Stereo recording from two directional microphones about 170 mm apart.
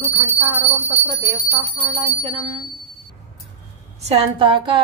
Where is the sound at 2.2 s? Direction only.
35° right (ahead or behind).